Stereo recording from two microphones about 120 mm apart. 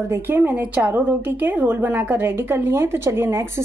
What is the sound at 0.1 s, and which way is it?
A woman's voice, 15° right (ahead or behind).